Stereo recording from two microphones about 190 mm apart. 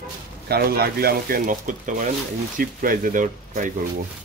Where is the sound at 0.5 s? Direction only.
55° right (ahead or behind).